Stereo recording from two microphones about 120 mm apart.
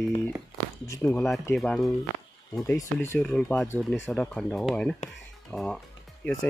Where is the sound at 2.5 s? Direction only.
25° left (ahead or behind).